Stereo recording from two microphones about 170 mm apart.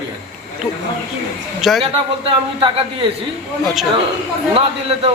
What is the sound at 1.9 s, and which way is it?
Speech, 30° right (ahead or behind).